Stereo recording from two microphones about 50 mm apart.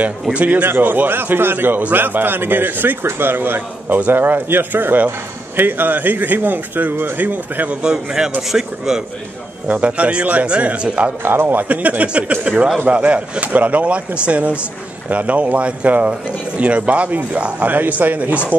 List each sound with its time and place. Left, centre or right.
0.3 s speech: right
0.7 s a man's voice: right
7.8 s speech: centre
9.7 s speech: right
11.2 s speech: right